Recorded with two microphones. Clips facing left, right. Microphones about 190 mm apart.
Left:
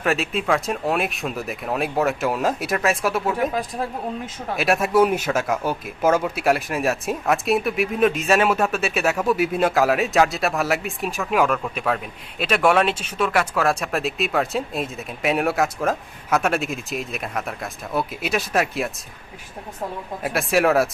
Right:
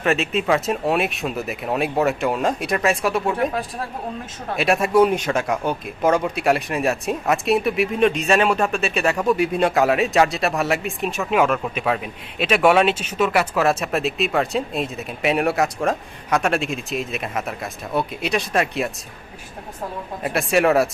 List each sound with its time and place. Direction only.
0.0 s speech: centre (ahead or behind)
20.2 s speech: centre (ahead or behind)